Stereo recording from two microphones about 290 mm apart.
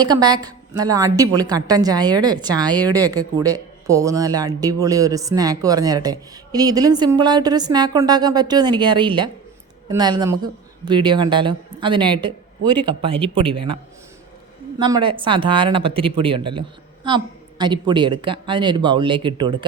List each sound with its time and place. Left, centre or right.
0.0 s a woman's voice: centre
14.8 s a woman's voice: centre